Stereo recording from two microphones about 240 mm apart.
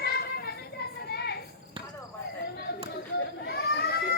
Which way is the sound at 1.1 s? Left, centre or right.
Left.